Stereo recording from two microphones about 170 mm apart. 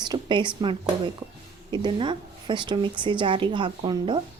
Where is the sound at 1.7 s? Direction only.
25° right (ahead or behind).